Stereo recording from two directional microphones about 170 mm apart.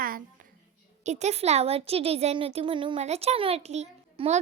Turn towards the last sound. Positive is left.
turn(degrees=-40)  # may be behind; listen again after turning